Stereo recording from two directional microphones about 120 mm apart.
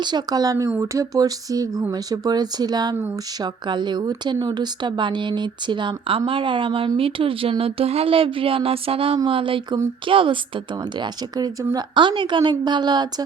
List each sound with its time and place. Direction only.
0.0 s a woman's voice: 35° right (ahead or behind)
11.0 s speech: 35° right (ahead or behind)